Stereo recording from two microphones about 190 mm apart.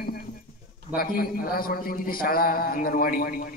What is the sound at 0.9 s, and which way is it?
A man's voice, 50° left (ahead or behind).